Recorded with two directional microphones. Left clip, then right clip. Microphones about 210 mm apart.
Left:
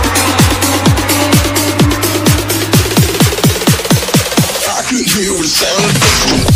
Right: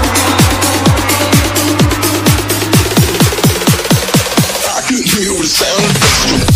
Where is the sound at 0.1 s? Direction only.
Centre (ahead or behind).